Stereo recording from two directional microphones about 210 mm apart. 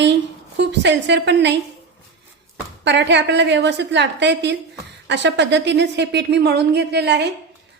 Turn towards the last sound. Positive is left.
turn(degrees=-55)  # may be behind; listen again after turning